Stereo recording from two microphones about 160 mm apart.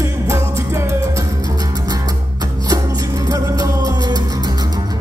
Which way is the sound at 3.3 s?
25° right (ahead or behind).